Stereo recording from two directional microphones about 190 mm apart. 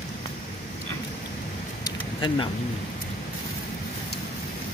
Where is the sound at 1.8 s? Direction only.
25° left (ahead or behind).